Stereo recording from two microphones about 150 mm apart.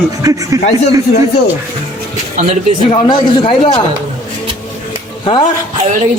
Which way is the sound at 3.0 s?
35° left (ahead or behind).